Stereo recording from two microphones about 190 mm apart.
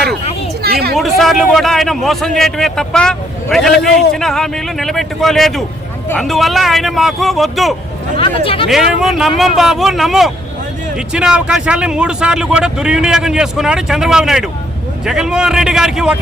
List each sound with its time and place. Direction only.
0.6 s hubbub: 55° right (ahead or behind)
0.9 s a man's voice: centre (ahead or behind)
8.2 s speech: 30° left (ahead or behind)
8.6 s a man's voice: centre (ahead or behind)